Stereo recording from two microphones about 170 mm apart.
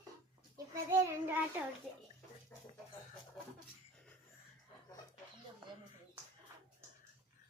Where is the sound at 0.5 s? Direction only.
15° right (ahead or behind).